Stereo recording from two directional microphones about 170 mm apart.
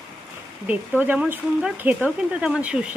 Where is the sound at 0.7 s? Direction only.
10° right (ahead or behind).